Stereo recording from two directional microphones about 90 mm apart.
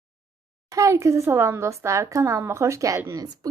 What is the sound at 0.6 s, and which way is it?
Speech, 35° right (ahead or behind).